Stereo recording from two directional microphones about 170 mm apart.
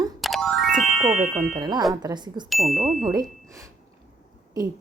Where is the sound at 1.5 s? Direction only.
25° right (ahead or behind).